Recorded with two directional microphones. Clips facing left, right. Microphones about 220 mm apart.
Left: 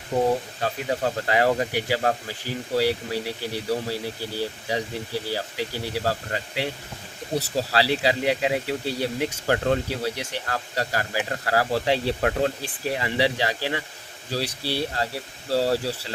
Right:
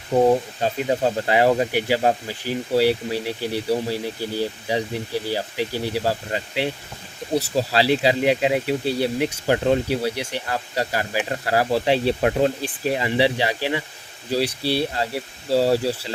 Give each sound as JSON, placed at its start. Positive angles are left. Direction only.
{"t": 0.6, "sound": "speech", "side_deg": -20}